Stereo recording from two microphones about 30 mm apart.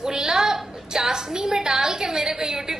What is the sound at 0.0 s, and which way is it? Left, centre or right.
Music, right.